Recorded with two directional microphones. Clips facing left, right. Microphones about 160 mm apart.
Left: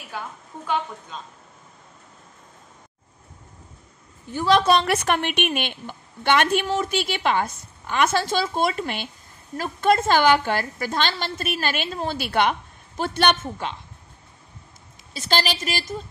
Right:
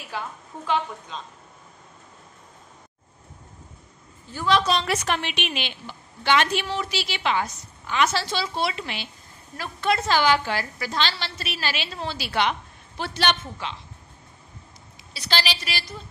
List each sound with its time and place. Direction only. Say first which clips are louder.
4.5 s a woman's voice: left 4 dB; 55° left (ahead or behind)
15.1 s a woman's voice: left 4 dB; 45° left (ahead or behind)